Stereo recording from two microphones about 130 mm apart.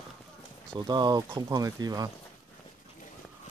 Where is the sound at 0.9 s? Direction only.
30° right (ahead or behind).